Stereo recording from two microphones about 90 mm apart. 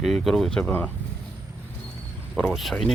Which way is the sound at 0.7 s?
20° left (ahead or behind).